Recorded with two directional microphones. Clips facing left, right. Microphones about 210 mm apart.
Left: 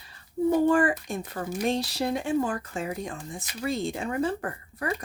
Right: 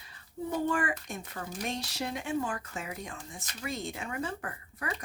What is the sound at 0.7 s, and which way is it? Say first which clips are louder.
Speech: left 9 dB; 35° left (ahead or behind).